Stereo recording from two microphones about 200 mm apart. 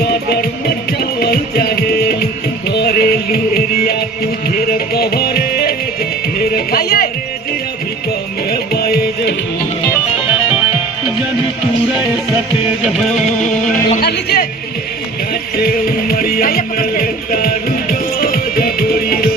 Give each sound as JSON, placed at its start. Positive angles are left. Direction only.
{"t": 0.0, "sound": "music", "side_deg": 50}
{"t": 8.4, "sound": "music", "side_deg": 50}
{"t": 10.2, "sound": "music", "side_deg": -5}
{"t": 14.0, "sound": "music", "side_deg": 55}